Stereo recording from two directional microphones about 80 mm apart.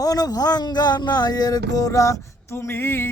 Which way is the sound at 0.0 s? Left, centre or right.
Left.